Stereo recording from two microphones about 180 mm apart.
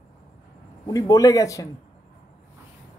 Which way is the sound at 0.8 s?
20° left (ahead or behind).